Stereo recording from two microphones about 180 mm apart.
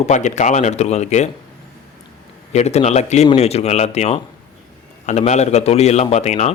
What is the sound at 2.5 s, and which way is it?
Speech, 40° left (ahead or behind).